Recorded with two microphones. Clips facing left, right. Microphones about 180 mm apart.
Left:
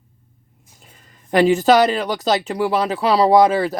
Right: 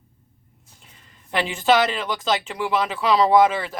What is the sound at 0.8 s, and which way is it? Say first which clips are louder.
Speech: left 4 dB; 45° left (ahead or behind).